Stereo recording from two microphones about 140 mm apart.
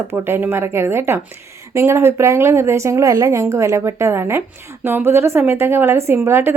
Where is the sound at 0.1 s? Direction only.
15° right (ahead or behind).